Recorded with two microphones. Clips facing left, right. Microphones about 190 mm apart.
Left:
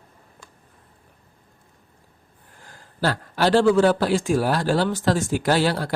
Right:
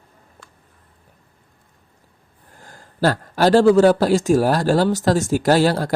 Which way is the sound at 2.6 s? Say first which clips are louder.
Right 5 dB; 45° right (ahead or behind).